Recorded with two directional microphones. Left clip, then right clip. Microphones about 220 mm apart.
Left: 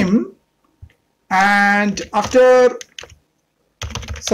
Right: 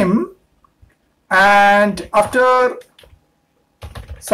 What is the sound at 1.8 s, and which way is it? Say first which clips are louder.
Speech: right 5 dB; 30° left (ahead or behind).